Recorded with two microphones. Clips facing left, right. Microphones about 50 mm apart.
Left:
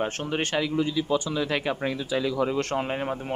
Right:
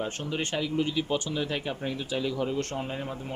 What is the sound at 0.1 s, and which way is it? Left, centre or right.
Speech, left.